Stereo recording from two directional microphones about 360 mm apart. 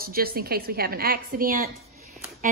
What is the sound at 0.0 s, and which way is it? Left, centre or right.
Speech, right.